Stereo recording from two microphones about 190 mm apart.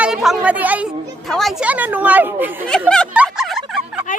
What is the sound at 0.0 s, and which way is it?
Speech, 5° right (ahead or behind).